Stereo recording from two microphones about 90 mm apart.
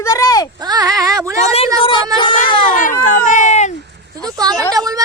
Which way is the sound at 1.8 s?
70° left (ahead or behind).